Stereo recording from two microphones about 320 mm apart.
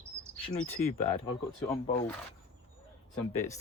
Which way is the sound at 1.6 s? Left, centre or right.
Centre.